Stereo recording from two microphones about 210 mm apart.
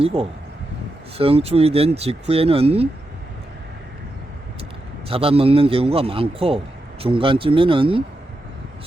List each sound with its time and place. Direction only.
0.0 s speech: 25° right (ahead or behind)
5.0 s speech: 25° right (ahead or behind)